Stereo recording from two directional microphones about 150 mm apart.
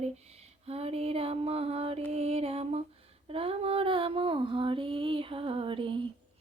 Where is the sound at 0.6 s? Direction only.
40° right (ahead or behind).